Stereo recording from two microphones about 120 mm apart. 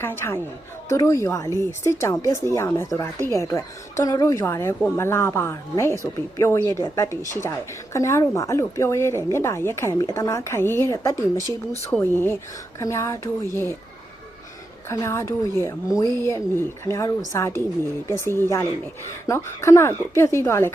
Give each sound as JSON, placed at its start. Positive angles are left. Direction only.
{"t": 0.0, "sound": "a woman's voice", "side_deg": 20}
{"t": 14.8, "sound": "a woman's voice", "side_deg": 25}